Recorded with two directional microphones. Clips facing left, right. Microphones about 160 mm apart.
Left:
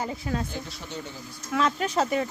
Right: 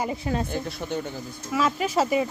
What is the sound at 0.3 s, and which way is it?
Speech, 25° right (ahead or behind).